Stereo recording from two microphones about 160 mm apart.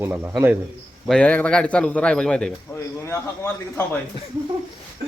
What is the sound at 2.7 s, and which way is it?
A man's voice, 15° left (ahead or behind).